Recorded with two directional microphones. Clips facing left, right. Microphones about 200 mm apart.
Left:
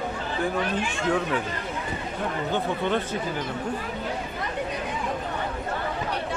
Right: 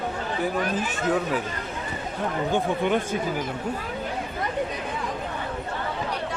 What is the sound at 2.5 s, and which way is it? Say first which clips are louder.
Speech: right 3 dB; 10° right (ahead or behind).